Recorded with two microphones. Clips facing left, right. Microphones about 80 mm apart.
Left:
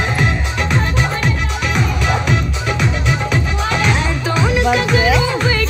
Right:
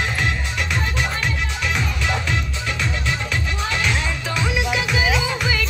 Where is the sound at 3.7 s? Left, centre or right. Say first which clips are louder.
Left 6 dB; left.